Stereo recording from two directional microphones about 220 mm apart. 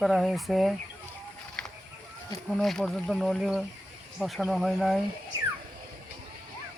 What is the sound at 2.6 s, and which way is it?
Speech, centre (ahead or behind).